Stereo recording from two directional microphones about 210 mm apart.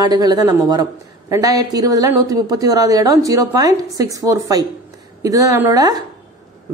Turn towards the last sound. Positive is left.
turn(degrees=-15)  # may be behind; listen again after turning